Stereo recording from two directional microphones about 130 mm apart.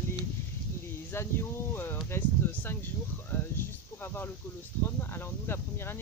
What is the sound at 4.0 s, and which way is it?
Speech, 15° left (ahead or behind).